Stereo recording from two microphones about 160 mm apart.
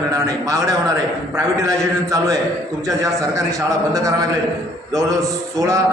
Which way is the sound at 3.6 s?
20° right (ahead or behind).